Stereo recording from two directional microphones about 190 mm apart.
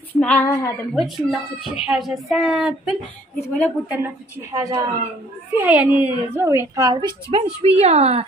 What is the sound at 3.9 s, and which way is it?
A woman's voice, 15° right (ahead or behind).